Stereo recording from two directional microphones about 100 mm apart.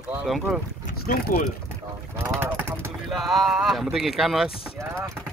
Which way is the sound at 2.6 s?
20° right (ahead or behind).